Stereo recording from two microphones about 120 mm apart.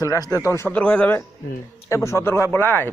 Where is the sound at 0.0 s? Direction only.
30° left (ahead or behind).